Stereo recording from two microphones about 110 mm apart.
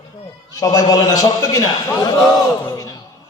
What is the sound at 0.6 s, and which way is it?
A man's voice, 35° left (ahead or behind).